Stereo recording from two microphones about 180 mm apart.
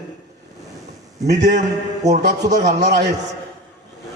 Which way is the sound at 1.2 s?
65° right (ahead or behind).